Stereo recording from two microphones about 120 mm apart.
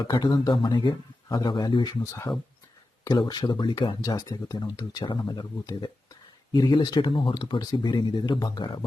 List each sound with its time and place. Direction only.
0.0 s speech: 35° left (ahead or behind)